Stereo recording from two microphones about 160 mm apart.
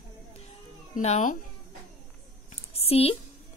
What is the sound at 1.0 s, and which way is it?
Speech, 45° left (ahead or behind).